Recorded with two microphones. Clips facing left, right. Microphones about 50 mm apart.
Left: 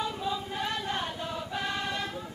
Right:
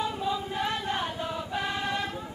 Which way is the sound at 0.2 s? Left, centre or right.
Centre.